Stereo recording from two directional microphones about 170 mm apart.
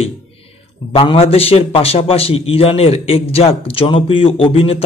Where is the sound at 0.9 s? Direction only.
30° left (ahead or behind).